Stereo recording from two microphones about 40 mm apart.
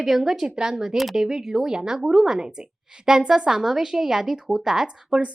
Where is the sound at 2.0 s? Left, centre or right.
Centre.